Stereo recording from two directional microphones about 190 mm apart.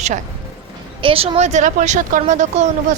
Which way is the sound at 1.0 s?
30° right (ahead or behind).